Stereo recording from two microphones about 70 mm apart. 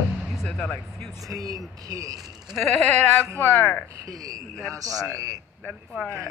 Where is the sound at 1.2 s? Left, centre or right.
Right.